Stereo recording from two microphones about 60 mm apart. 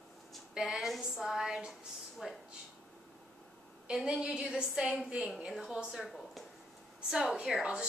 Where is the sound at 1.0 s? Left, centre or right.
Centre.